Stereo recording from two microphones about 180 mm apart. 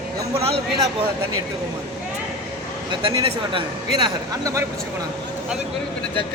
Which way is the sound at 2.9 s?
25° right (ahead or behind).